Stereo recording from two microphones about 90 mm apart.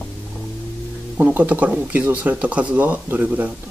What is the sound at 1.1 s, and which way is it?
Speech, 20° right (ahead or behind).